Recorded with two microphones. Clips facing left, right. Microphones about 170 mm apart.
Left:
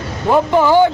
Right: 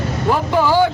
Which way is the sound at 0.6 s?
20° left (ahead or behind).